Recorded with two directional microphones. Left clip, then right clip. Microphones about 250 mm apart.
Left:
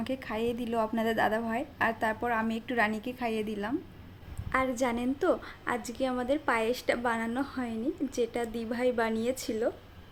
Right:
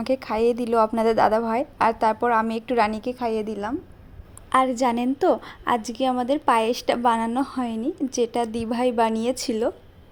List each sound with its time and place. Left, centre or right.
0.0 s a woman's voice: right
4.4 s a woman's voice: right